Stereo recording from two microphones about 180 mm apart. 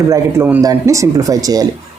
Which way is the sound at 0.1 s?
10° right (ahead or behind).